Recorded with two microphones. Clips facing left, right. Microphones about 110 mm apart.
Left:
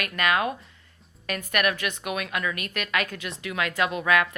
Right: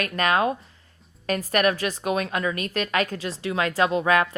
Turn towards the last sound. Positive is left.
turn(degrees=-35)  # may be behind; listen again after turning